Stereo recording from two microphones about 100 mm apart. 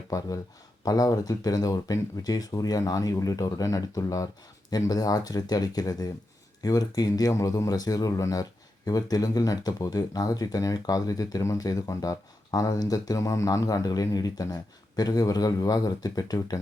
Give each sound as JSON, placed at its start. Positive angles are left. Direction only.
{"t": 0.9, "sound": "speech", "side_deg": 40}